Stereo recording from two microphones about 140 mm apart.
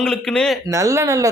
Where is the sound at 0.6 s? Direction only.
20° right (ahead or behind).